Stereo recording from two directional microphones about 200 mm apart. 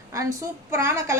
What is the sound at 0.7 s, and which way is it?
Speech, 15° right (ahead or behind).